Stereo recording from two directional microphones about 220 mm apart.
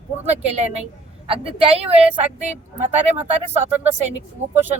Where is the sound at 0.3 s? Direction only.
30° right (ahead or behind).